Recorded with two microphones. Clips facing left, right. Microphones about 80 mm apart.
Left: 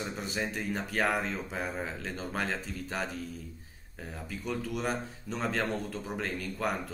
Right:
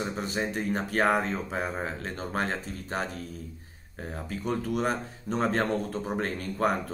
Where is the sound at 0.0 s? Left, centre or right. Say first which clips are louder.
Right 4 dB; right.